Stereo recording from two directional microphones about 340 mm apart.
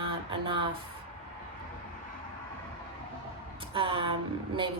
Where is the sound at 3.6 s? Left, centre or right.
Centre.